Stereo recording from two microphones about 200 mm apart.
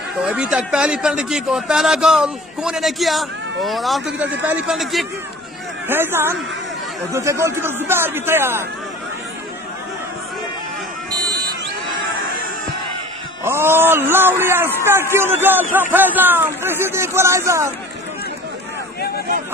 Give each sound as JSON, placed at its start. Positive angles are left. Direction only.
{"t": 0.2, "sound": "a man's voice", "side_deg": -5}
{"t": 11.1, "sound": "buzzer", "side_deg": -20}
{"t": 13.4, "sound": "speech", "side_deg": -10}